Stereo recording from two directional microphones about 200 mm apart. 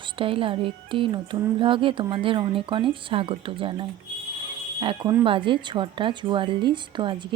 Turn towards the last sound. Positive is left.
turn(degrees=-25)  # may be behind; listen again after turning